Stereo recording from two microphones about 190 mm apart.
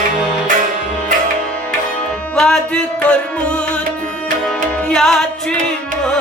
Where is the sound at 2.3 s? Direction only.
5° left (ahead or behind).